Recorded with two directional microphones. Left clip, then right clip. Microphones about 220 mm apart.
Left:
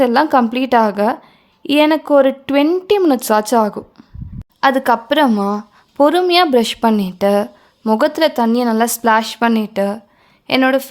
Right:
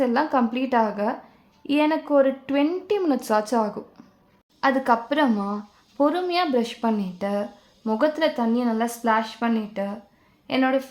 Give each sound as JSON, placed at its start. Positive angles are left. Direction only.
{"t": 0.0, "sound": "a woman's voice", "side_deg": 45}